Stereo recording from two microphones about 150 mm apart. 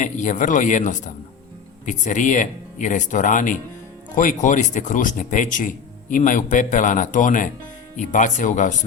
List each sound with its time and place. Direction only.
0.0 s speech: 55° left (ahead or behind)